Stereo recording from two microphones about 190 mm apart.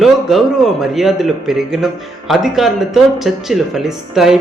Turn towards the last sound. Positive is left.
turn(degrees=0)  # may be behind; listen again after turning